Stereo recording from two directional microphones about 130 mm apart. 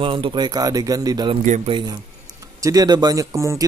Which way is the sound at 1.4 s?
70° right (ahead or behind).